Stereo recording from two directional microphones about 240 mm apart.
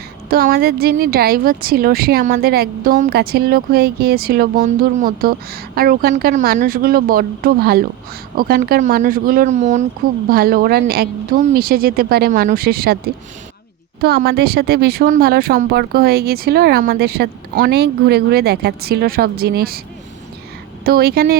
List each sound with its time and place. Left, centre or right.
0.3 s speech: right
14.0 s speech: right
20.8 s speech: right